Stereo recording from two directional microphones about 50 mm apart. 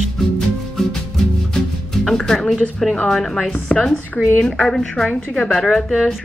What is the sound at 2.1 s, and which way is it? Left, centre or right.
Music, centre.